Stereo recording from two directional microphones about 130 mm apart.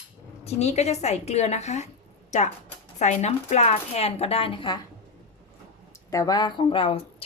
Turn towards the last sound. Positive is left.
turn(degrees=45)  # may be behind; listen again after turning